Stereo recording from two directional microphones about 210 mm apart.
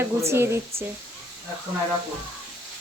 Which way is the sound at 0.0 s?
10° right (ahead or behind).